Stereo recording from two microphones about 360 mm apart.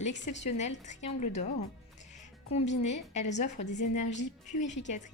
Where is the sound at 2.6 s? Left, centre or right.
Left.